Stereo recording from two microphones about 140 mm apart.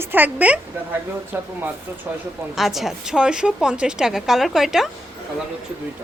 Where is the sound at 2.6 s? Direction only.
Centre (ahead or behind).